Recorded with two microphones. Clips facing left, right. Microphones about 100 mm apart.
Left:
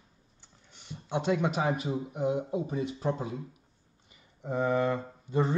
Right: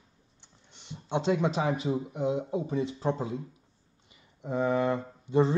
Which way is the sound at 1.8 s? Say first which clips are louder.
Right 1 dB; 25° right (ahead or behind).